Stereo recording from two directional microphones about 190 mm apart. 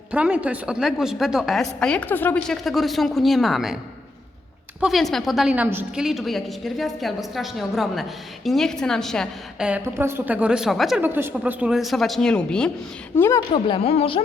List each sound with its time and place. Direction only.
0.1 s a woman's voice: 5° right (ahead or behind)
4.8 s a woman's voice: centre (ahead or behind)
13.5 s speech: 30° left (ahead or behind)